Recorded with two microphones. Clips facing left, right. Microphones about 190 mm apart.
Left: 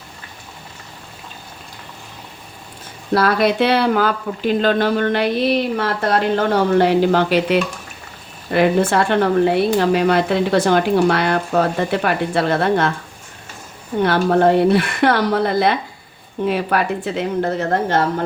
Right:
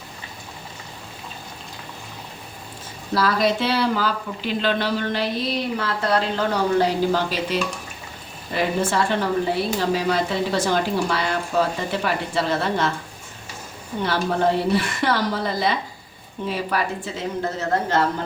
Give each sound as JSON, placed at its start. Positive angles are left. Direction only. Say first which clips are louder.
{"t": 3.2, "sound": "speech", "louder": "left 5 dB", "side_deg": 60}
{"t": 14.0, "sound": "speech", "louder": "left 7 dB", "side_deg": 60}